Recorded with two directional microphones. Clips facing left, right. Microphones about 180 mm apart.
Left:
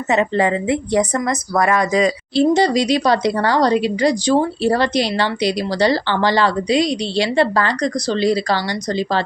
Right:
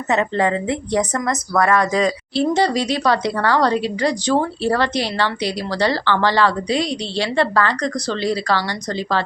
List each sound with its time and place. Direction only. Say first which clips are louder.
0.1 s a woman's voice: left 2 dB; 10° left (ahead or behind)